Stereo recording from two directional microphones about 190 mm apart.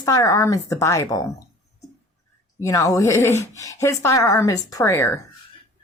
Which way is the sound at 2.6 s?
15° left (ahead or behind).